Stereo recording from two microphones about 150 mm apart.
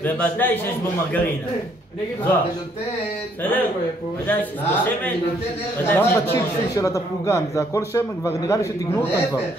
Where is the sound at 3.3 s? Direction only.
10° left (ahead or behind).